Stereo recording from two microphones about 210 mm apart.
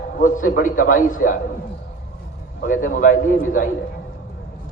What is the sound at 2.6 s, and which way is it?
A man's voice, 40° left (ahead or behind).